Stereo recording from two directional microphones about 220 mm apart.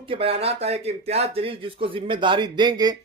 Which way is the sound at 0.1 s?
25° right (ahead or behind).